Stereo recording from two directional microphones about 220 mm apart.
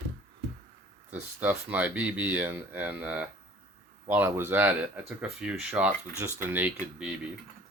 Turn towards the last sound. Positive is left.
turn(degrees=-10)  # may be behind; listen again after turning